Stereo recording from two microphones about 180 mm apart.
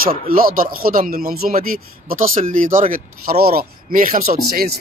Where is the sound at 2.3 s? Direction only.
45° right (ahead or behind).